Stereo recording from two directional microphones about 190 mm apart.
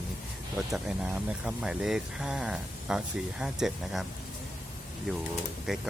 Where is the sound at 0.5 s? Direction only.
5° right (ahead or behind).